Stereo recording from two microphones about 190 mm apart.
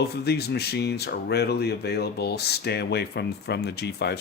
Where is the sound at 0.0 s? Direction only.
60° left (ahead or behind).